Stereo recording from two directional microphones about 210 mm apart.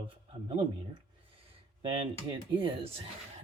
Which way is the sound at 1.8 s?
25° right (ahead or behind).